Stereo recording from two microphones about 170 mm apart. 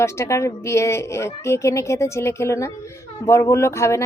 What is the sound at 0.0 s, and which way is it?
A woman's voice, 15° left (ahead or behind).